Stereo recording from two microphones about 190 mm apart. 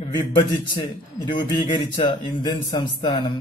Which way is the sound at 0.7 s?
25° left (ahead or behind).